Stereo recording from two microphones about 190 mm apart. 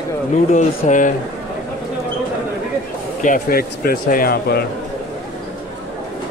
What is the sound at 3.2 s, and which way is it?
Speech, 50° left (ahead or behind).